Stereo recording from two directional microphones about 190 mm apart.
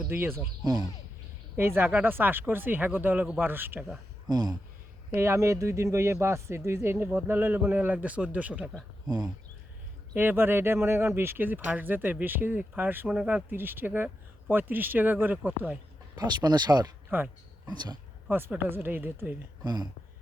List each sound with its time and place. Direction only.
0.1 s speech: 10° right (ahead or behind)
4.3 s speech: 20° right (ahead or behind)
9.0 s speech: 20° right (ahead or behind)
16.1 s speech: 20° right (ahead or behind)
18.3 s speech: 10° right (ahead or behind)